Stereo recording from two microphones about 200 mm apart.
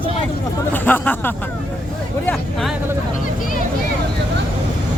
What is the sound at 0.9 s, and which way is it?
Speech, 10° left (ahead or behind).